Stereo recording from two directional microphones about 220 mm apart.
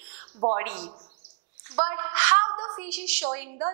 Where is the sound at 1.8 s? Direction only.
15° right (ahead or behind).